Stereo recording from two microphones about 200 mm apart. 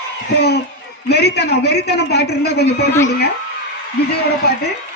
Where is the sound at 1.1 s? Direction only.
55° left (ahead or behind).